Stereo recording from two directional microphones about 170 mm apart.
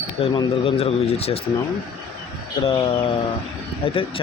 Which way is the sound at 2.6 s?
35° left (ahead or behind).